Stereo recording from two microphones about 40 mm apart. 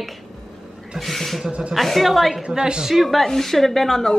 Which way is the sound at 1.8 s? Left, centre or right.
Centre.